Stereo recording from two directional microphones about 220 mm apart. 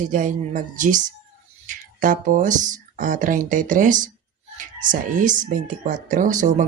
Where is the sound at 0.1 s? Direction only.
35° right (ahead or behind).